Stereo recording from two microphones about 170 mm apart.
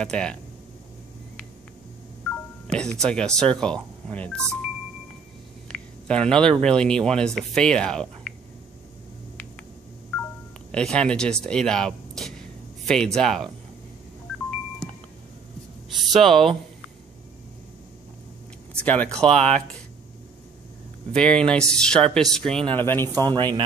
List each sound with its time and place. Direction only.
0.0 s speech: 5° left (ahead or behind)
2.2 s speech: 5° left (ahead or behind)
5.7 s a sound: 5° left (ahead or behind)
6.6 s speech: 5° left (ahead or behind)
10.7 s speech: 5° left (ahead or behind)
11.4 s a sound: 5° left (ahead or behind)
16.1 s speech: centre (ahead or behind)
19.2 s speech: 5° left (ahead or behind)
21.1 s speech: 5° left (ahead or behind)
23.1 s speech: 25° right (ahead or behind)